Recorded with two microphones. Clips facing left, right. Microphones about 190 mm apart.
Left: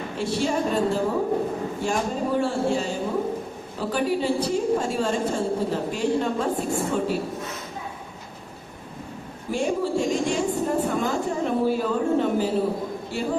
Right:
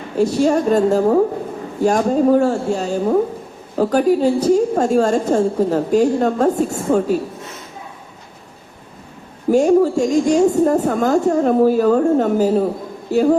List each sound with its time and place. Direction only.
0.2 s a woman's voice: 40° right (ahead or behind)
9.5 s a woman's voice: 45° right (ahead or behind)